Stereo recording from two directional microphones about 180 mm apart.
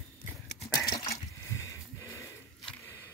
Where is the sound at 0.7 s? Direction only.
20° left (ahead or behind).